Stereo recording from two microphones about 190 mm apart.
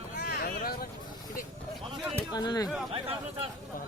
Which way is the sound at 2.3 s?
20° left (ahead or behind).